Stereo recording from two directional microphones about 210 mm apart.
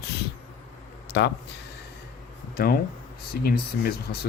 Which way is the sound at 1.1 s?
55° left (ahead or behind).